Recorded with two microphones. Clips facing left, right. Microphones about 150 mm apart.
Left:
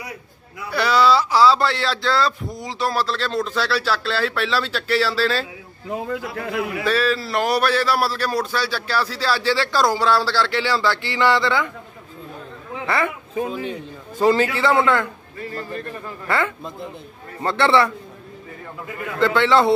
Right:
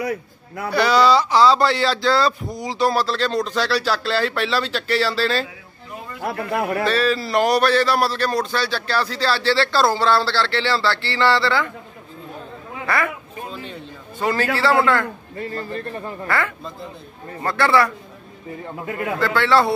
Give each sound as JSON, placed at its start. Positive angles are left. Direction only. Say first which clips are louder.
{"t": 0.7, "sound": "speech", "louder": "right 1 dB", "side_deg": 0}
{"t": 5.9, "sound": "a man's voice", "louder": "left 9 dB", "side_deg": 90}
{"t": 6.8, "sound": "a man's voice", "louder": "left 1 dB", "side_deg": 5}
{"t": 12.8, "sound": "speech", "louder": "even", "side_deg": 25}
{"t": 13.5, "sound": "a man's voice", "louder": "left 5 dB", "side_deg": 10}
{"t": 15.3, "sound": "a man's voice", "louder": "right 1 dB", "side_deg": -35}
{"t": 16.3, "sound": "a man's voice", "louder": "left 2 dB", "side_deg": 20}
{"t": 19.1, "sound": "a man's voice", "louder": "left 2 dB", "side_deg": 20}